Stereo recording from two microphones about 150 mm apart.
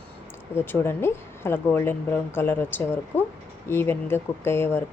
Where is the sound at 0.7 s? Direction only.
15° left (ahead or behind).